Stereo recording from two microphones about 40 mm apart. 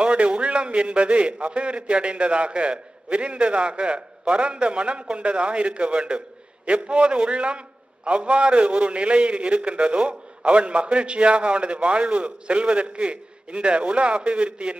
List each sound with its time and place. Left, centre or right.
0.0 s a man's voice: right